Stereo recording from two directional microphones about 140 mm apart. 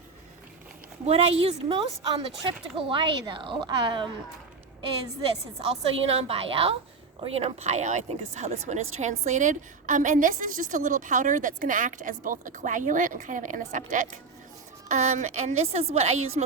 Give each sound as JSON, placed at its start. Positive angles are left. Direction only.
{"t": 1.0, "sound": "speech", "side_deg": -45}
{"t": 5.5, "sound": "a woman's voice", "side_deg": -45}